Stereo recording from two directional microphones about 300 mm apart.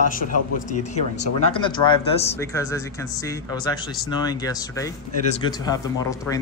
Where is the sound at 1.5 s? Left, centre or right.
Centre.